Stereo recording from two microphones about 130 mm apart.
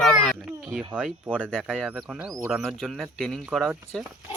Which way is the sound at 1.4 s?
5° left (ahead or behind).